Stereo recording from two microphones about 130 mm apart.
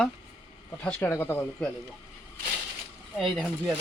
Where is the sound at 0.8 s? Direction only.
15° left (ahead or behind).